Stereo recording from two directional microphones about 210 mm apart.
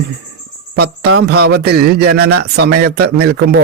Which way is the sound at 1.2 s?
50° right (ahead or behind).